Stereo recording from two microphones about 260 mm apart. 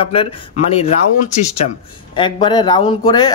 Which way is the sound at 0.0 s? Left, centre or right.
Left.